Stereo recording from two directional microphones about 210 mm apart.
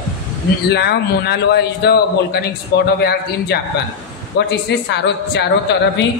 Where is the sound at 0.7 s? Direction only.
50° left (ahead or behind).